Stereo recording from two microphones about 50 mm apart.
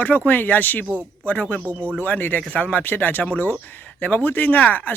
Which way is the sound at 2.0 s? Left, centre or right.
Left.